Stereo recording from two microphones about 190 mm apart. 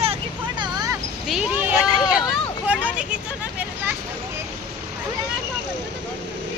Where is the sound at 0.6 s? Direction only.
20° right (ahead or behind).